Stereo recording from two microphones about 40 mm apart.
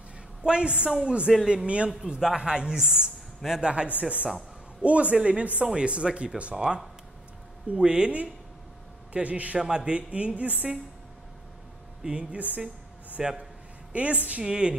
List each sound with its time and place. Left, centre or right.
0.4 s a woman's voice: right
9.1 s speech: right
9.6 s a woman's voice: right
9.9 s speech: right
12.0 s a woman's voice: right
12.4 s speech: right
13.2 s a man's voice: centre
13.9 s speech: right
14.4 s a woman's voice: right